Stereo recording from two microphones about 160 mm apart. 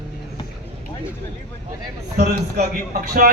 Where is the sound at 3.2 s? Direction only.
70° right (ahead or behind).